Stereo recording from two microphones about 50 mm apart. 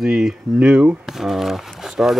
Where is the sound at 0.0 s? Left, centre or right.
Centre.